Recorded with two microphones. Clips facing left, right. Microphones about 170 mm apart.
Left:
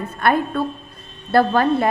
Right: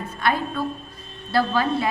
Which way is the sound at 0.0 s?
55° left (ahead or behind).